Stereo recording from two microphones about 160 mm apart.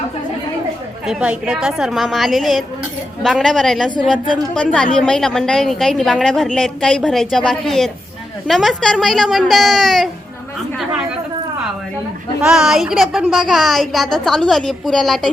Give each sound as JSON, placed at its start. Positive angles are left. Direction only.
{"t": 1.0, "sound": "a woman's voice", "side_deg": -5}
{"t": 12.4, "sound": "a woman's voice", "side_deg": -5}